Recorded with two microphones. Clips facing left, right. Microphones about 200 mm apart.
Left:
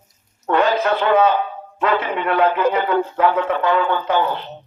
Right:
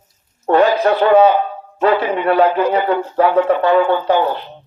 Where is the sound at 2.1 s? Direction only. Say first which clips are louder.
Right 4 dB; 35° right (ahead or behind).